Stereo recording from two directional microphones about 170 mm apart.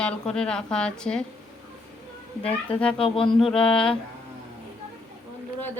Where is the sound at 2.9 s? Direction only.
30° left (ahead or behind).